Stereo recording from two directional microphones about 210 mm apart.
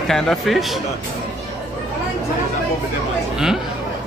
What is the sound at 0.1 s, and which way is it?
Speech, centre (ahead or behind).